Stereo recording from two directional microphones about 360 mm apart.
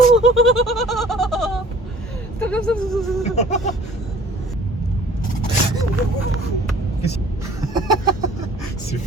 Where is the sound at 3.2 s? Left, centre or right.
Centre.